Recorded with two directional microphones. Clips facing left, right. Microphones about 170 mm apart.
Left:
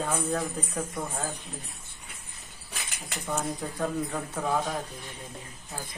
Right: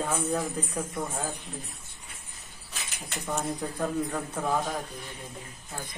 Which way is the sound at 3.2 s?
Centre (ahead or behind).